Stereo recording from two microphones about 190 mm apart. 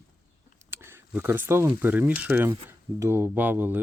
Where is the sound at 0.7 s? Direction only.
10° right (ahead or behind).